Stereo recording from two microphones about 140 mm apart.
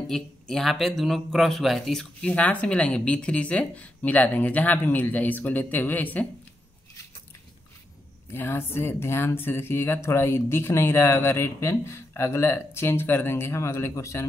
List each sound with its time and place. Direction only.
0.1 s speech: centre (ahead or behind)
8.3 s speech: 15° left (ahead or behind)